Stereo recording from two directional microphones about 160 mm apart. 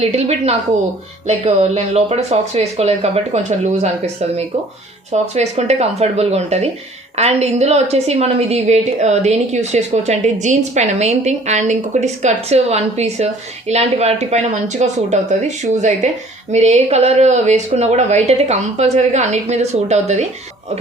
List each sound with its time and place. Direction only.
0.0 s a woman's voice: 40° right (ahead or behind)